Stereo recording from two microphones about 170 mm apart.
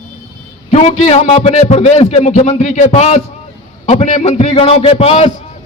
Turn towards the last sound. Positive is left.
turn(degrees=35)  # may be behind; listen again after turning